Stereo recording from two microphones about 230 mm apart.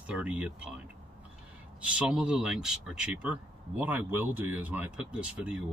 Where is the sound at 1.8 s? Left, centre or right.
Centre.